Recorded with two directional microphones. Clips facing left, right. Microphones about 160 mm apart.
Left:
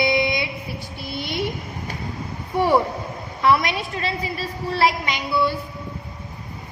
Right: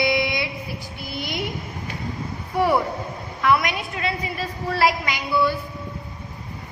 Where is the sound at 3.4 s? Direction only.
30° left (ahead or behind).